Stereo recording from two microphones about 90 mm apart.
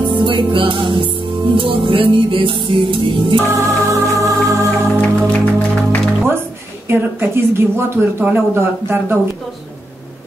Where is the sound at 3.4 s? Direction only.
35° right (ahead or behind).